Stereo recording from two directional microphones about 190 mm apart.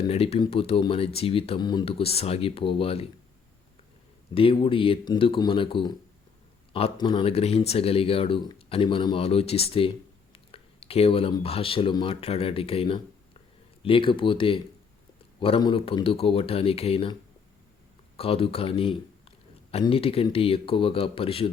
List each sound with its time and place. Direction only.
0.1 s speech: 30° left (ahead or behind)
4.4 s speech: 30° left (ahead or behind)
18.2 s speech: 30° left (ahead or behind)